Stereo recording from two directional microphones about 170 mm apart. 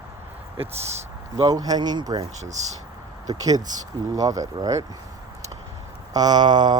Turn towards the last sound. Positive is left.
turn(degrees=-25)  # may be behind; listen again after turning